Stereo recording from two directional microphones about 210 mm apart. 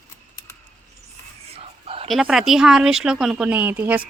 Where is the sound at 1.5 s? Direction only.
30° right (ahead or behind).